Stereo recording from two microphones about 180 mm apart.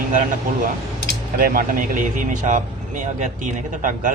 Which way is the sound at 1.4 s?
50° right (ahead or behind).